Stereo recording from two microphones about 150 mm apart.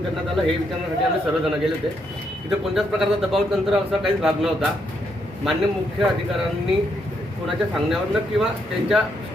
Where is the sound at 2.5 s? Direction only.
5° right (ahead or behind).